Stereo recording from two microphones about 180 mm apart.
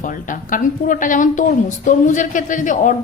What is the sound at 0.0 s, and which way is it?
A woman's voice, 45° left (ahead or behind).